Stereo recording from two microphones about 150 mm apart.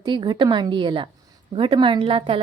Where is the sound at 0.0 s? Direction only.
30° right (ahead or behind).